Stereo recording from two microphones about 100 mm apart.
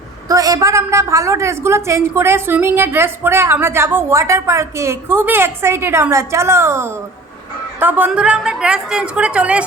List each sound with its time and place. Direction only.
0.3 s a woman's voice: 35° right (ahead or behind)
7.8 s a woman's voice: 15° right (ahead or behind)